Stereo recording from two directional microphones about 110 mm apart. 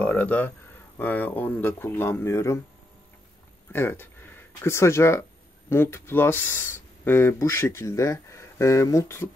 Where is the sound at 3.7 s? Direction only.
20° left (ahead or behind).